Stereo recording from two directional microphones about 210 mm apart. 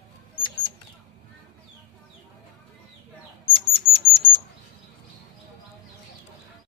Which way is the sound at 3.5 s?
25° left (ahead or behind).